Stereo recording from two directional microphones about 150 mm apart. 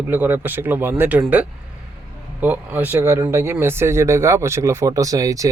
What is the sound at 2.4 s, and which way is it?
Speech, 10° right (ahead or behind).